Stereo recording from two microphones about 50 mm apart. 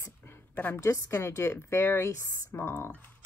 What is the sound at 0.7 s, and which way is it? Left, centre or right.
A woman's voice, left.